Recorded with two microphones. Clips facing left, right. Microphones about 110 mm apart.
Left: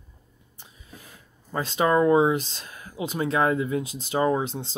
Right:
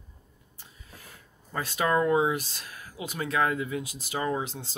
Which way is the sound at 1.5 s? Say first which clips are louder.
Left 4 dB; 25° left (ahead or behind).